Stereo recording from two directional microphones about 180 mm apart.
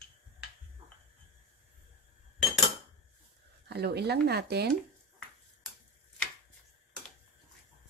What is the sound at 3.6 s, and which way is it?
Speech, 65° right (ahead or behind).